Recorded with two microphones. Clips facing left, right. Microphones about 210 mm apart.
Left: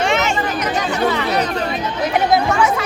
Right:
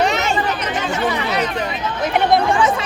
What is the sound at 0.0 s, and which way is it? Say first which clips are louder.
Chatter: even; 35° right (ahead or behind).